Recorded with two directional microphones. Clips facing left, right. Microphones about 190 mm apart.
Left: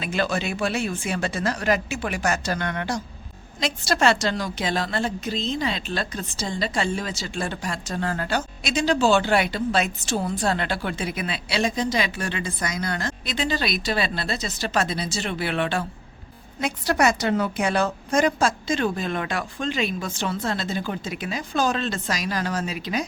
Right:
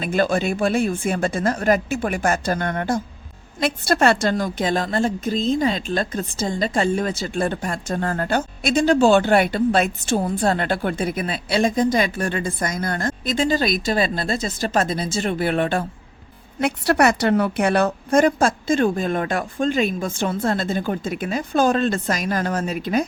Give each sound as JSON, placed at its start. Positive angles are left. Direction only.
{"t": 0.0, "sound": "a woman's voice", "side_deg": -50}
{"t": 16.6, "sound": "a woman's voice", "side_deg": -65}